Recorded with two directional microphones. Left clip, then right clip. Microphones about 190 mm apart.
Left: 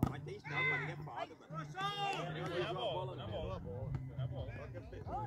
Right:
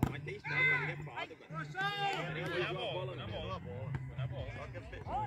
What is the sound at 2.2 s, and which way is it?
A man's voice, 35° left (ahead or behind).